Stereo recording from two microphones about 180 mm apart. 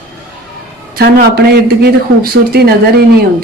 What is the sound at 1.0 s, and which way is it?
Speech, 60° right (ahead or behind).